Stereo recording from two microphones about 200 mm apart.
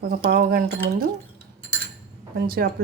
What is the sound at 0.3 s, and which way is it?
Speech, 45° right (ahead or behind).